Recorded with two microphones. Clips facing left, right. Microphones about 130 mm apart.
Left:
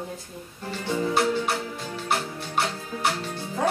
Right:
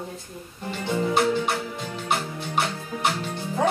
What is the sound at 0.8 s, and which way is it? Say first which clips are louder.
Music: right 1 dB; 20° right (ahead or behind).